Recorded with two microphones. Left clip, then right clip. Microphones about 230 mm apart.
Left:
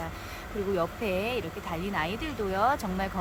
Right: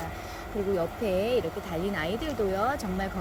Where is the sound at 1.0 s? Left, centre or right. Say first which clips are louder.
Right 4 dB; centre.